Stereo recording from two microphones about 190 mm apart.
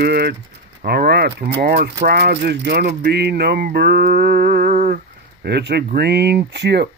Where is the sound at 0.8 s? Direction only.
55° right (ahead or behind).